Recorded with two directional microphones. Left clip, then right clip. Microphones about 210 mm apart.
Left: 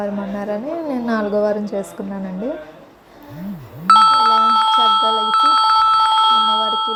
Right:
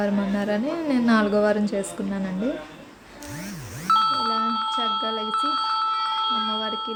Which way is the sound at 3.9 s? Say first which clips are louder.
Left 10 dB; 50° left (ahead or behind).